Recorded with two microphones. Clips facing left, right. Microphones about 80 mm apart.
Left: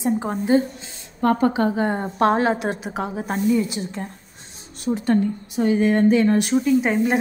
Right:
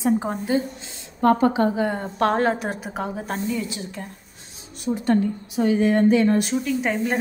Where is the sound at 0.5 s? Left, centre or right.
Left.